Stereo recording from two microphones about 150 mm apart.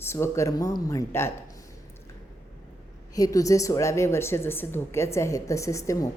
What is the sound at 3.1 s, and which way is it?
A woman's voice, 25° left (ahead or behind).